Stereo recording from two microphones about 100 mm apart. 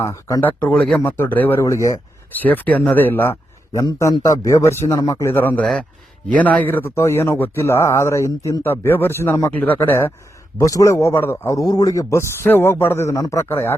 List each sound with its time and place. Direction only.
0.0 s a man's voice: 30° left (ahead or behind)
0.4 s speech: 15° left (ahead or behind)
1.6 s a man's voice: 30° left (ahead or behind)
2.3 s speech: 20° left (ahead or behind)
3.8 s a man's voice: 40° left (ahead or behind); by 13.7 s 25° left (ahead or behind)